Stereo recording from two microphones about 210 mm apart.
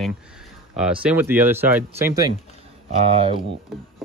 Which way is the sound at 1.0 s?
10° right (ahead or behind).